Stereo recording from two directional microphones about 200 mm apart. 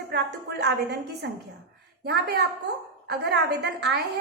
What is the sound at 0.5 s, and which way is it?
A woman's voice, 55° right (ahead or behind).